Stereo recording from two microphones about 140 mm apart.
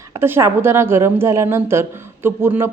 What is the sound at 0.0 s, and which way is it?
A woman's voice, 20° right (ahead or behind).